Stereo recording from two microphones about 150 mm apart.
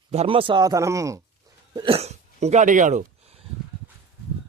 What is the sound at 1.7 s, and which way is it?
Speech, 35° right (ahead or behind).